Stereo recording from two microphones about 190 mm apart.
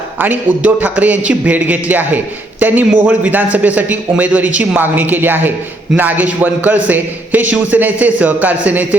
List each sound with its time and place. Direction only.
0.2 s a man's voice: 10° right (ahead or behind)